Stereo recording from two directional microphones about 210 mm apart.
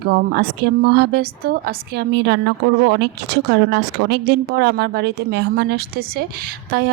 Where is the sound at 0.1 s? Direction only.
50° right (ahead or behind).